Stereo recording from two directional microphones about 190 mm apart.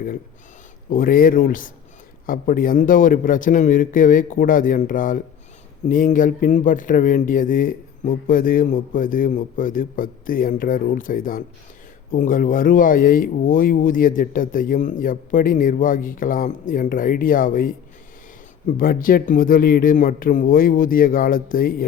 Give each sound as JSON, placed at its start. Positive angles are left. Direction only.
{"t": 0.9, "sound": "speech", "side_deg": 45}
{"t": 18.8, "sound": "speech", "side_deg": 50}